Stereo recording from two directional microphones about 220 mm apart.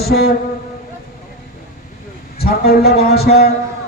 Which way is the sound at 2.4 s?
45° left (ahead or behind).